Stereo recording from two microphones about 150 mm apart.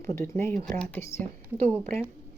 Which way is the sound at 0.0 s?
20° left (ahead or behind).